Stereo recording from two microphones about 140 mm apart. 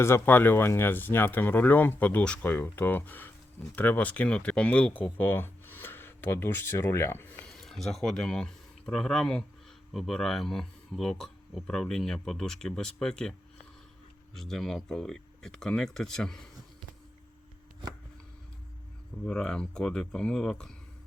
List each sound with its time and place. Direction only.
0.0 s speech: 15° left (ahead or behind)
7.4 s speech: 5° left (ahead or behind)
14.3 s speech: centre (ahead or behind)
19.2 s speech: 5° left (ahead or behind)